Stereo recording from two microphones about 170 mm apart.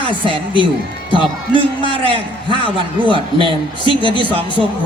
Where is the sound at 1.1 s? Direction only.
30° left (ahead or behind).